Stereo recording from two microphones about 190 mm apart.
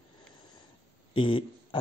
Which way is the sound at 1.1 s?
25° left (ahead or behind).